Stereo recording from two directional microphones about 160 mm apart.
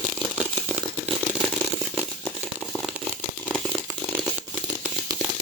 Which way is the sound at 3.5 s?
5° right (ahead or behind).